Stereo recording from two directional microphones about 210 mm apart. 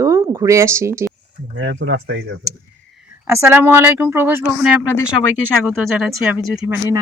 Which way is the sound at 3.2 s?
15° right (ahead or behind).